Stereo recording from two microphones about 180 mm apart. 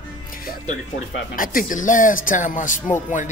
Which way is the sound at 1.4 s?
50° left (ahead or behind).